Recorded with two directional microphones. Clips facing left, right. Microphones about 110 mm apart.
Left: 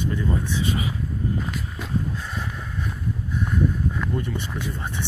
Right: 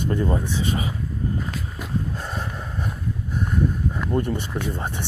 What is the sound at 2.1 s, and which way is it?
Snort, 40° right (ahead or behind).